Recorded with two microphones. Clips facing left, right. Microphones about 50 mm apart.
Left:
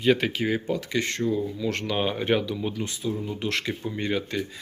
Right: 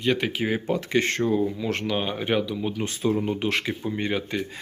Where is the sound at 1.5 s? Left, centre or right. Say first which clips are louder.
Right 1 dB; right.